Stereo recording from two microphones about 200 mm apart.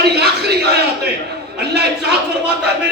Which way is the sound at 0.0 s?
55° right (ahead or behind).